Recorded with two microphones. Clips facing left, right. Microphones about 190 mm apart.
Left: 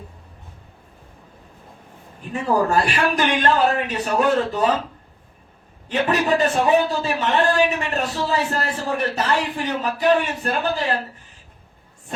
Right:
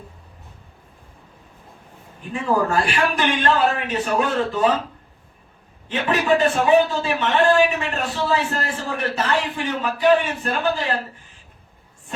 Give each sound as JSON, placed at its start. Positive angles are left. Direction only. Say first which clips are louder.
{"t": 2.6, "sound": "a man's voice", "louder": "left 1 dB", "side_deg": 40}
{"t": 5.9, "sound": "a man's voice", "louder": "even", "side_deg": 40}